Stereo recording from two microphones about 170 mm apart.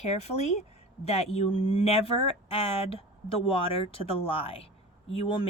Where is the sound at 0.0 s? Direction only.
40° left (ahead or behind).